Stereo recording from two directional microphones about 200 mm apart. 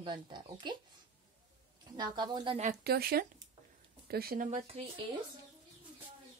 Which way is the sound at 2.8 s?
50° right (ahead or behind).